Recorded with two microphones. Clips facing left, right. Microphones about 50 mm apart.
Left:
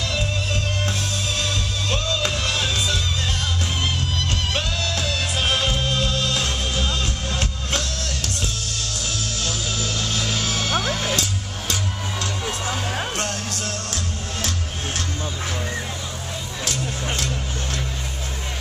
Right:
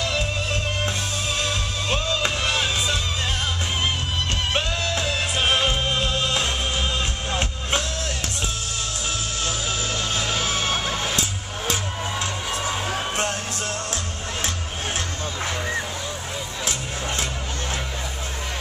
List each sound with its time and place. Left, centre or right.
0.0 s music: centre
4.6 s music: centre
9.4 s music: centre